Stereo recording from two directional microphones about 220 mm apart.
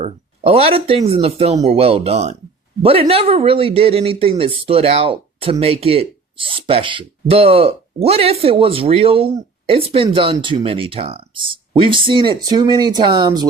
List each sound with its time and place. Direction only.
0.0 s speech: 25° right (ahead or behind)